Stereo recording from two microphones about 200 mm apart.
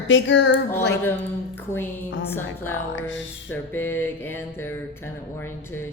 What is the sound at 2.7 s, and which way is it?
Speech, 65° left (ahead or behind).